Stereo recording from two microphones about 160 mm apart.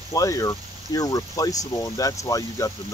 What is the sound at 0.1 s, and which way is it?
Speech, 20° left (ahead or behind).